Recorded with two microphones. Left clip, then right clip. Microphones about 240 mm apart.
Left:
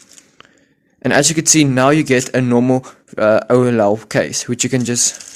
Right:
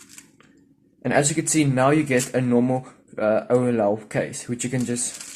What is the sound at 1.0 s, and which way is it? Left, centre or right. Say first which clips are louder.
Speech: left 8 dB; left.